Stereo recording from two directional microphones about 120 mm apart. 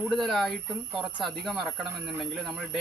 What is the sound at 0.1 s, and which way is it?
Speech, centre (ahead or behind).